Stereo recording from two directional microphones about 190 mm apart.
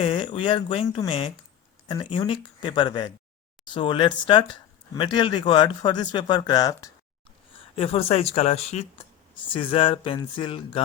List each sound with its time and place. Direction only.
0.0 s speech: 25° left (ahead or behind)
7.8 s speech: 30° left (ahead or behind)